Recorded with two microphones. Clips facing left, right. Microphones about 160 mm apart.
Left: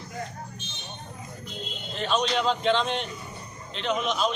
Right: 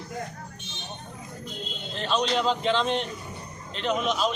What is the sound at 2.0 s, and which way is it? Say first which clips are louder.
A man's voice: even; centre (ahead or behind).